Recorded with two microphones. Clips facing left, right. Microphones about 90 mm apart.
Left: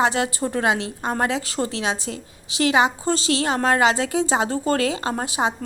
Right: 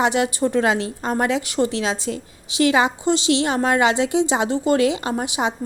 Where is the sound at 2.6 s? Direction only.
25° left (ahead or behind).